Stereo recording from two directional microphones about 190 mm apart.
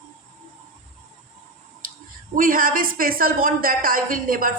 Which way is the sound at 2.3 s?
45° right (ahead or behind).